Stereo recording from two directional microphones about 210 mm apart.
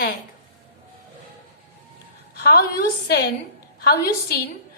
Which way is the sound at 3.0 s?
50° left (ahead or behind).